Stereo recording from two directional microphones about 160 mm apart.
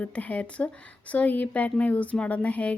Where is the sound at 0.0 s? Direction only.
10° left (ahead or behind).